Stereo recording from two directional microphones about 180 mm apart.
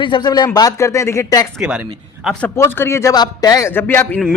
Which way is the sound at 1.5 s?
10° right (ahead or behind).